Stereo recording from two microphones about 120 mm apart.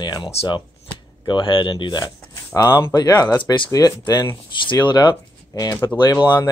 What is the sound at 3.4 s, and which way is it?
Speech, 45° left (ahead or behind).